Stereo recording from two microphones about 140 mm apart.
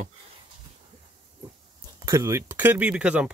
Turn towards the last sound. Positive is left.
turn(degrees=-10)  # may be behind; listen again after turning